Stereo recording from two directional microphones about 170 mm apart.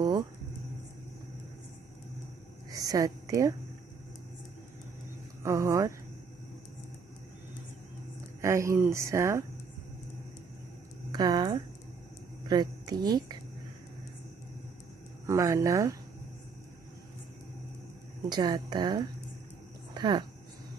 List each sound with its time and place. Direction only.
2.7 s a woman's voice: 20° right (ahead or behind)
5.4 s speech: 20° right (ahead or behind)
8.4 s speech: 15° right (ahead or behind)
11.1 s a woman's voice: 25° right (ahead or behind)
15.2 s speech: 20° right (ahead or behind)
18.3 s speech: 25° right (ahead or behind)
19.9 s a sound: 25° right (ahead or behind)